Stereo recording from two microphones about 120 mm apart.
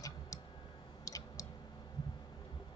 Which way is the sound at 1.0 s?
30° left (ahead or behind).